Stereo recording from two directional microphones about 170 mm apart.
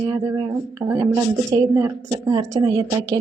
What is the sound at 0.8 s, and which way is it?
Speech, 15° right (ahead or behind).